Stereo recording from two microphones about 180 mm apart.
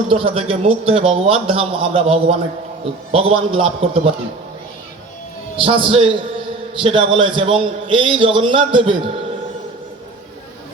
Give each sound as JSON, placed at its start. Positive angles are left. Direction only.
{"t": 0.1, "sound": "a man's voice", "side_deg": -30}
{"t": 5.5, "sound": "a man's voice", "side_deg": -30}